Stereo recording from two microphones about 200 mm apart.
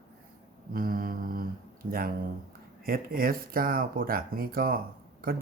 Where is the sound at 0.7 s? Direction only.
45° right (ahead or behind).